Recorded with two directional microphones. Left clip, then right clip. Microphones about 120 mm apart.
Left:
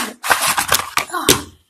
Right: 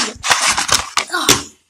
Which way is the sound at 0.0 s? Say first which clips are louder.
Right 1 dB; centre (ahead or behind).